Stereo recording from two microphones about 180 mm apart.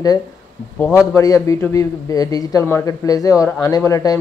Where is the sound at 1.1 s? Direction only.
15° left (ahead or behind).